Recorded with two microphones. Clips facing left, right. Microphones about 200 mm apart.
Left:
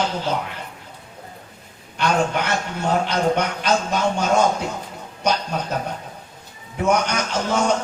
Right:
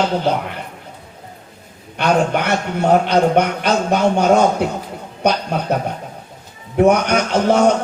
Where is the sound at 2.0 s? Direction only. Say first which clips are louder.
Right 4 dB; 60° right (ahead or behind).